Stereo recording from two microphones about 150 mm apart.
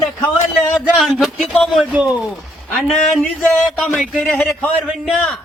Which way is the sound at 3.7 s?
Centre (ahead or behind).